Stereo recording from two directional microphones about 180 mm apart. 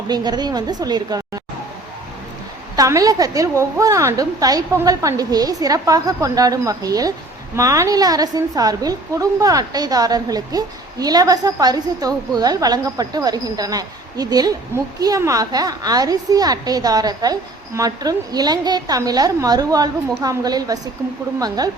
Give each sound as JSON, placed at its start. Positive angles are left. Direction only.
{"t": 0.1, "sound": "a woman's voice", "side_deg": -25}
{"t": 2.7, "sound": "a woman's voice", "side_deg": -20}